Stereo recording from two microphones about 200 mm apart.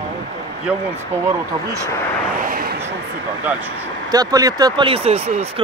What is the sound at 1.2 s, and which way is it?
Speech, 15° right (ahead or behind).